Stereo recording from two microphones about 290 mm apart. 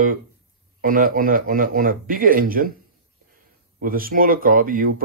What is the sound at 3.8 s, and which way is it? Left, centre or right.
Speech, right.